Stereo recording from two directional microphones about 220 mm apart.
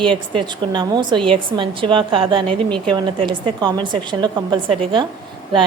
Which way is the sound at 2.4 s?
5° left (ahead or behind).